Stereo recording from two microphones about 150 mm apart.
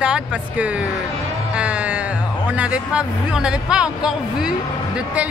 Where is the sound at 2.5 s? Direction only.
10° right (ahead or behind).